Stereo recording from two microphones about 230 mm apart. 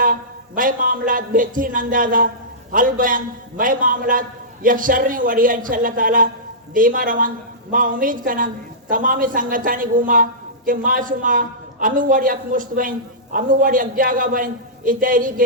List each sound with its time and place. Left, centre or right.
0.0 s a man's voice: right